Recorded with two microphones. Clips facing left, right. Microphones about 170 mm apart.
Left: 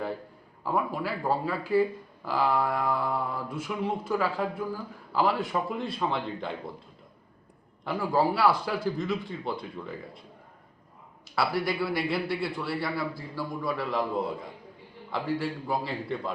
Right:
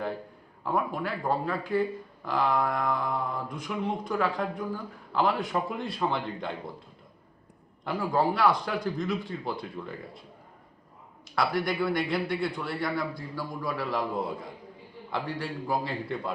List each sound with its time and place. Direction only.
0.6 s speech: 5° left (ahead or behind)
7.9 s speech: 5° left (ahead or behind)
11.3 s speech: 5° left (ahead or behind)